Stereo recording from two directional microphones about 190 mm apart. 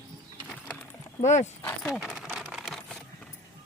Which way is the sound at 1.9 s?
Centre (ahead or behind).